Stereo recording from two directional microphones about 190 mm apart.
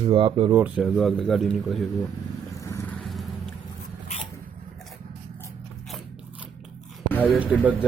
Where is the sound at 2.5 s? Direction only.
15° left (ahead or behind).